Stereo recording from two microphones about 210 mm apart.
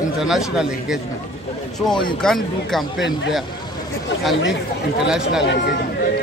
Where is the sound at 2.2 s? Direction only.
Centre (ahead or behind).